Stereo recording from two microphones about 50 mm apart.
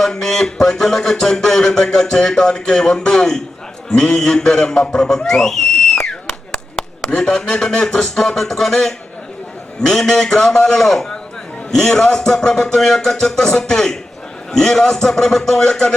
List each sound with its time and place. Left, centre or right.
0.0 s a man's voice: centre
7.1 s speech: centre